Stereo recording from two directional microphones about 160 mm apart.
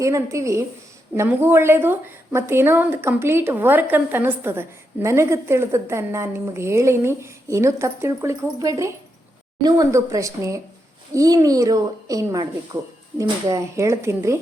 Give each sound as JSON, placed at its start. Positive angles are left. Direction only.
{"t": 0.0, "sound": "a woman's voice", "side_deg": -20}